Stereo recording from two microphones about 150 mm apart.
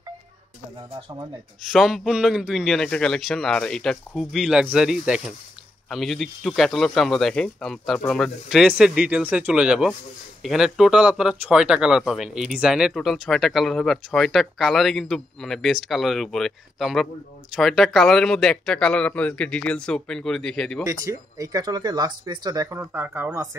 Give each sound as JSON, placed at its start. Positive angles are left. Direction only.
{"t": 1.7, "sound": "speech", "side_deg": 0}
{"t": 20.8, "sound": "speech", "side_deg": -20}